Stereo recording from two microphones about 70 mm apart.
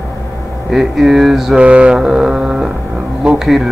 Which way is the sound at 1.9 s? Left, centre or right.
Centre.